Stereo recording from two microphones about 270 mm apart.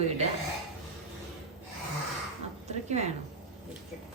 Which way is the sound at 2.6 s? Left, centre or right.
Right.